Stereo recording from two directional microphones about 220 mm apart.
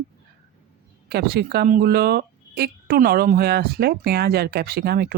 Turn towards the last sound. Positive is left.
turn(degrees=-45)  # may be behind; listen again after turning